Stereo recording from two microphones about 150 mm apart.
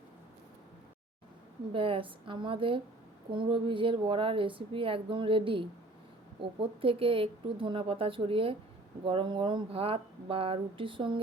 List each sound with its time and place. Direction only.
1.7 s a woman's voice: 35° right (ahead or behind)